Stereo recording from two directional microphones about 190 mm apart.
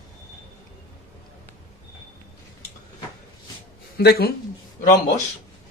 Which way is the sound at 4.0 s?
55° left (ahead or behind).